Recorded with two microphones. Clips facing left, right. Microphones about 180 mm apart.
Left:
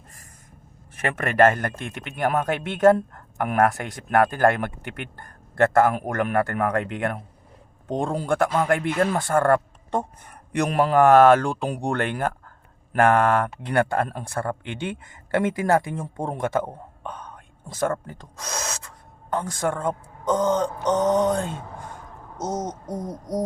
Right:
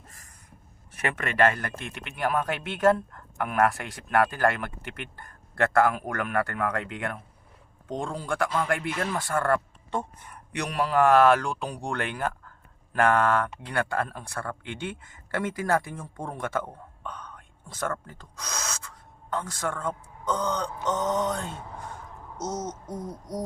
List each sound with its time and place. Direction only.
0.9 s speech: 50° left (ahead or behind)
11.7 s speech: 60° left (ahead or behind)
14.4 s speech: 35° left (ahead or behind)
14.7 s speech: 60° left (ahead or behind)
16.0 s mantra: 25° left (ahead or behind)
16.4 s speech: 45° left (ahead or behind)
18.1 s speech: 50° left (ahead or behind)
20.8 s mantra: 20° left (ahead or behind)
22.4 s speech: 20° left (ahead or behind)
22.9 s speech: 45° left (ahead or behind)